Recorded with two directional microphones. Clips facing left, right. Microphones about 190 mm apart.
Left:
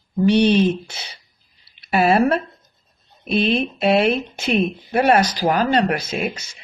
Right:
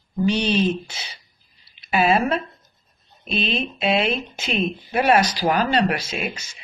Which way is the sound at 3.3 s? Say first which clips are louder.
Left 6 dB; 65° left (ahead or behind).